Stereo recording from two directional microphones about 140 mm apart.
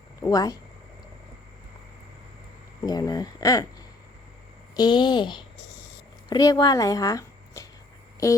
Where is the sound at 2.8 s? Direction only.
30° left (ahead or behind).